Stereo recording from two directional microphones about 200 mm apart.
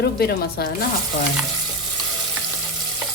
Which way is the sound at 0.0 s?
50° left (ahead or behind).